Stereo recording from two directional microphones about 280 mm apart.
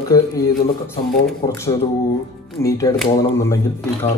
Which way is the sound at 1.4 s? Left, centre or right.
Centre.